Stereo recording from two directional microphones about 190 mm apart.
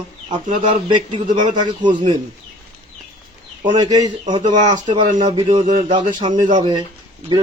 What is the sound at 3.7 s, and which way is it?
A man's voice, 20° right (ahead or behind).